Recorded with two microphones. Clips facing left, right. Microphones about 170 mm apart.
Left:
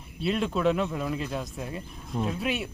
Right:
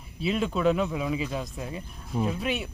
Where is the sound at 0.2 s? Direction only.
Centre (ahead or behind).